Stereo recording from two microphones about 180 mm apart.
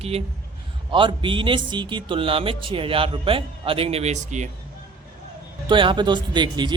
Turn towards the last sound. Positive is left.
turn(degrees=-25)  # may be behind; listen again after turning